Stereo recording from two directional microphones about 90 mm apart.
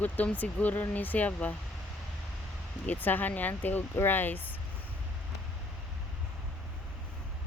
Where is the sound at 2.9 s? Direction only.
20° left (ahead or behind).